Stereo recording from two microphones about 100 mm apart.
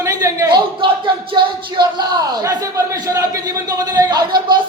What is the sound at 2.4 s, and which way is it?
A man's voice, 35° right (ahead or behind).